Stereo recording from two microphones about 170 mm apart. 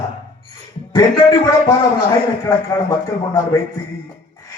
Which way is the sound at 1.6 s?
25° left (ahead or behind).